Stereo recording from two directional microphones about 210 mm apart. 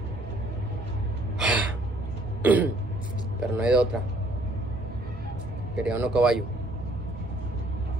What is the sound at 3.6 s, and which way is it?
Speech, 5° right (ahead or behind).